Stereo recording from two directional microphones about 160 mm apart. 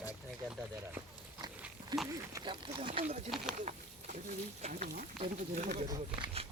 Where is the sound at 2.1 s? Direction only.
25° right (ahead or behind).